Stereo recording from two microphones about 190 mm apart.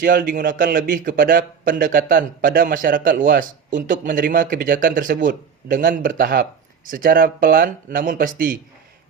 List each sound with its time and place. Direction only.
0.0 s a man's voice: 50° right (ahead or behind)